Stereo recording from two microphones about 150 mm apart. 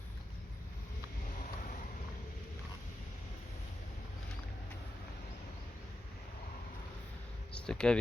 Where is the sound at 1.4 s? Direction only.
55° left (ahead or behind).